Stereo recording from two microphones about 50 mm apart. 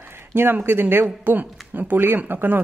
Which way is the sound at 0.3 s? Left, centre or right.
Right.